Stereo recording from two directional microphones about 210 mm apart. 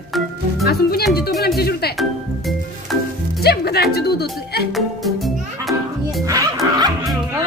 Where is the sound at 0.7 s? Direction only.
50° left (ahead or behind).